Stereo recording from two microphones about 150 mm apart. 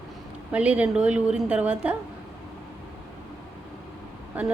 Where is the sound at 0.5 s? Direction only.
10° right (ahead or behind).